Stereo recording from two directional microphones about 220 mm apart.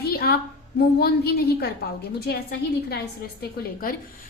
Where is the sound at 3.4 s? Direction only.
40° left (ahead or behind).